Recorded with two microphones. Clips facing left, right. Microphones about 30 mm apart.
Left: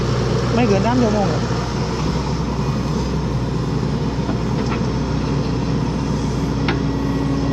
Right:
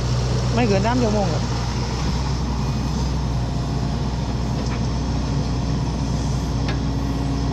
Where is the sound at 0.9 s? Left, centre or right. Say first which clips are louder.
Left 3 dB; centre.